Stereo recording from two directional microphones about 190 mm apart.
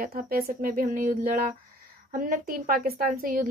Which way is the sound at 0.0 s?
45° right (ahead or behind).